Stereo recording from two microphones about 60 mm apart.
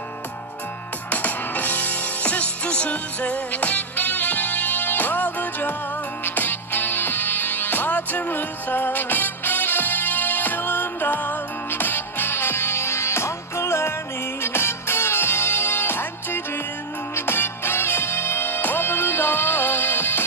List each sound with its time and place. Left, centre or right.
1.1 s music: left